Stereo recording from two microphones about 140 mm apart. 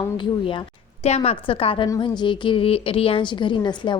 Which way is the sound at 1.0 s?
45° left (ahead or behind).